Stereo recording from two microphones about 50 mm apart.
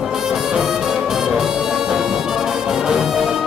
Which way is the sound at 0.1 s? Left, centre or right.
Centre.